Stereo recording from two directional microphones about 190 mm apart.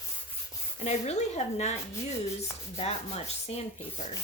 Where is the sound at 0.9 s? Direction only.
35° left (ahead or behind).